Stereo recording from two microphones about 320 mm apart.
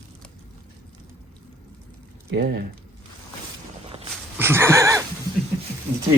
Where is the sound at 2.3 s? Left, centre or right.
Right.